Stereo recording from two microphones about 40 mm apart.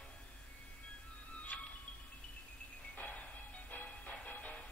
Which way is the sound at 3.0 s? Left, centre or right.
Left.